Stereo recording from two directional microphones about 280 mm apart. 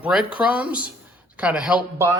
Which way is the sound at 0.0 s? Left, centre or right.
Centre.